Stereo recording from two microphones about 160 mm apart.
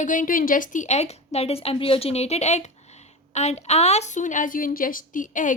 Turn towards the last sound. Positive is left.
turn(degrees=55)  # may be behind; listen again after turning